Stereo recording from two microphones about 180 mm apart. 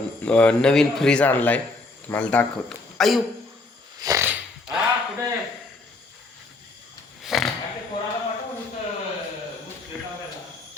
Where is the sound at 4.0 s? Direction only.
20° right (ahead or behind).